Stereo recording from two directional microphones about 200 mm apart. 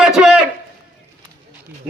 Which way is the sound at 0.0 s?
5° right (ahead or behind).